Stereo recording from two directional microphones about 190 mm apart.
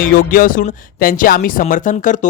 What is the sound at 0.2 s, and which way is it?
Speech, 50° left (ahead or behind).